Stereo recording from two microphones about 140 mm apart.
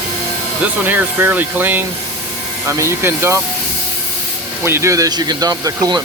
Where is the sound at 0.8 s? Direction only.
15° right (ahead or behind).